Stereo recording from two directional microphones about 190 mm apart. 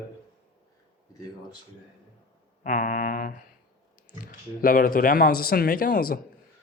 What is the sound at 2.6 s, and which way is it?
Speech, 45° left (ahead or behind).